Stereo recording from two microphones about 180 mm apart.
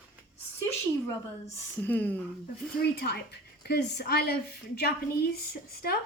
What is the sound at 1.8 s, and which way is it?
Speech, 10° left (ahead or behind).